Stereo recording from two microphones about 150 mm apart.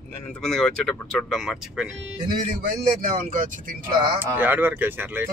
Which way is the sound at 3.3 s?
60° right (ahead or behind).